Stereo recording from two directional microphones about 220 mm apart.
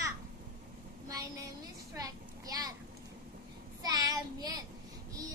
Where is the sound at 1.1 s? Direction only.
15° right (ahead or behind).